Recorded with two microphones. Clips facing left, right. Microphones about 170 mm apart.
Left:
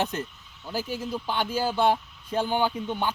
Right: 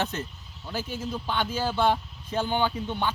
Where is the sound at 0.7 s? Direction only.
10° left (ahead or behind).